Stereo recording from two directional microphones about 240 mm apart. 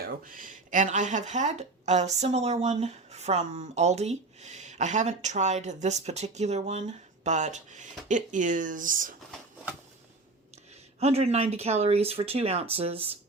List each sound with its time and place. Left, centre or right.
0.0 s speech: right
11.0 s speech: right